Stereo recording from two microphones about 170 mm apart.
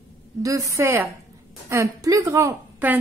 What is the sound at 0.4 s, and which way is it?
A woman's voice, 20° right (ahead or behind).